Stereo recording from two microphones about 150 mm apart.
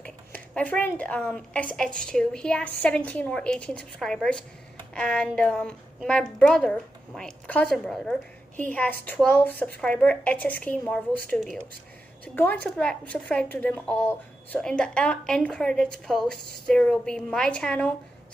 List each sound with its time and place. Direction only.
0.0 s a woman's voice: 10° left (ahead or behind)
12.4 s a woman's voice: 10° left (ahead or behind)